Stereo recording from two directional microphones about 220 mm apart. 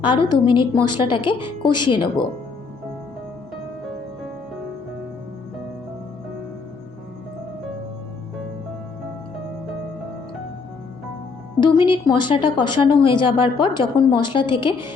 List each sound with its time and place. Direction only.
0.0 s speech: 20° left (ahead or behind)
11.6 s speech: 20° left (ahead or behind)